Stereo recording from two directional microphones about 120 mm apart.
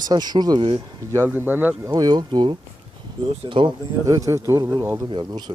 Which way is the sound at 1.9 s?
35° right (ahead or behind).